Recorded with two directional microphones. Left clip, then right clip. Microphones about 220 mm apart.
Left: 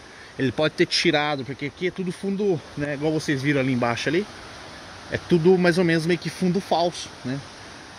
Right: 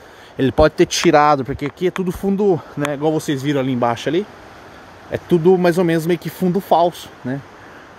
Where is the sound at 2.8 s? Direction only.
20° right (ahead or behind).